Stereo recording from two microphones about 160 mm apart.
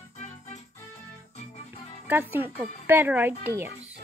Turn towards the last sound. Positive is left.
turn(degrees=-15)  # may be behind; listen again after turning